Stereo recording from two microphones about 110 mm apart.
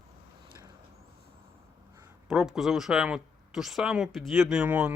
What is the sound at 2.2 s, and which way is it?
Speech, 5° right (ahead or behind).